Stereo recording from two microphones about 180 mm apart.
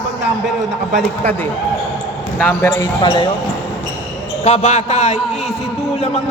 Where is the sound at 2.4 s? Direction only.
5° left (ahead or behind).